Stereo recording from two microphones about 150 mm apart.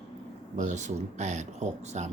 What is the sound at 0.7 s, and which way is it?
Speech, 50° right (ahead or behind).